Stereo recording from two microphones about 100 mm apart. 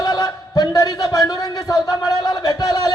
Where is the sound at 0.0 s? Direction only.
40° left (ahead or behind).